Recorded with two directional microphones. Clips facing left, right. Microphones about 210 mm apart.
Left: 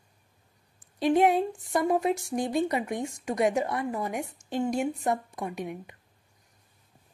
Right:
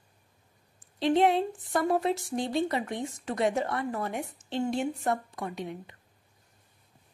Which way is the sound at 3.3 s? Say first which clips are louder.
Left 2 dB; 15° left (ahead or behind).